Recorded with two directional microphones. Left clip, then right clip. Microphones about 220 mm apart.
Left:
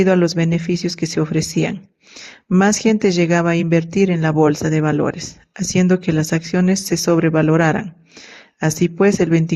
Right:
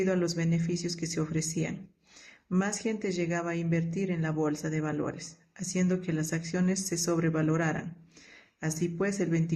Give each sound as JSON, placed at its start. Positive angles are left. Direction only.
{"t": 0.0, "sound": "speech", "side_deg": 40}